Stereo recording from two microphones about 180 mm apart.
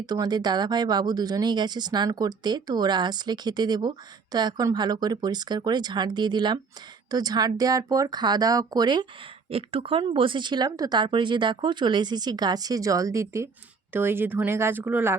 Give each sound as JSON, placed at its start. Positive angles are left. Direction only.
{"t": 0.0, "sound": "speech", "side_deg": -20}